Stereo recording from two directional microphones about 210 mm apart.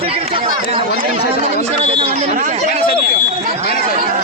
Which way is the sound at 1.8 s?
30° right (ahead or behind).